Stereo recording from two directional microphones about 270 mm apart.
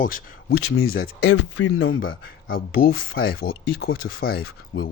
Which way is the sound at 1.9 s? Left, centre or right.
Left.